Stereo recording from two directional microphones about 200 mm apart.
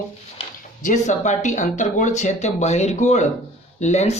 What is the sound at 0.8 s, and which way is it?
A woman's voice, 40° left (ahead or behind).